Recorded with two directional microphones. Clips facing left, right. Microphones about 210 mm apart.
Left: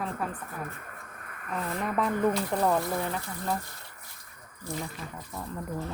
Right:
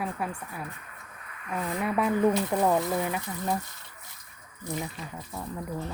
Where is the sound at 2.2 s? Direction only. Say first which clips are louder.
Right 2 dB; 15° right (ahead or behind).